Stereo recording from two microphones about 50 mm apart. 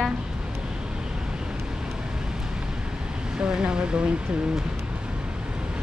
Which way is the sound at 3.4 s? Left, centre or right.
Centre.